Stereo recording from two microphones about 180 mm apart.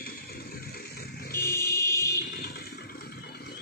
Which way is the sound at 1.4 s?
15° left (ahead or behind).